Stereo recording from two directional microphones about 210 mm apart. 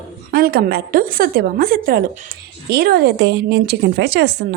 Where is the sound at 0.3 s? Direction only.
45° right (ahead or behind).